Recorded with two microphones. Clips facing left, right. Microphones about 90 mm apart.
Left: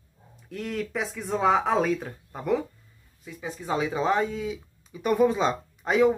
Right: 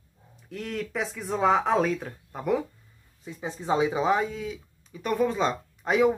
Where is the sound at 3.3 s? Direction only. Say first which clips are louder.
Right 2 dB; 30° right (ahead or behind).